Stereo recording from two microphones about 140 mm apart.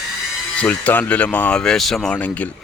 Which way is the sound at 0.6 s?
10° left (ahead or behind).